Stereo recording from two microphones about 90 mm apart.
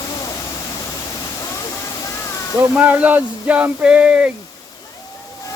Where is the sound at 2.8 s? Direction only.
15° right (ahead or behind).